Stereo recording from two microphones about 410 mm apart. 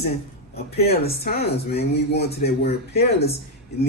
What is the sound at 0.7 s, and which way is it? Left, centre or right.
Speech, centre.